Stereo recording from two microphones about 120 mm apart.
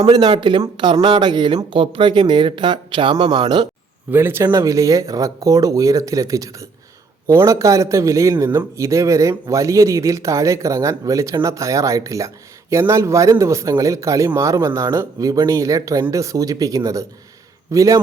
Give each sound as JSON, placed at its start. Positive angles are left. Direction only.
{"t": 0.1, "sound": "speech", "side_deg": -40}
{"t": 4.1, "sound": "speech", "side_deg": -20}